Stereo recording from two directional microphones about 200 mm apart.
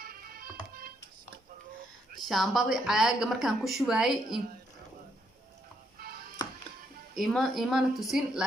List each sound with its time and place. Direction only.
0.0 s music: 50° right (ahead or behind)
2.1 s a woman's voice: centre (ahead or behind)
6.4 s music: 20° left (ahead or behind)
7.2 s a woman's voice: centre (ahead or behind)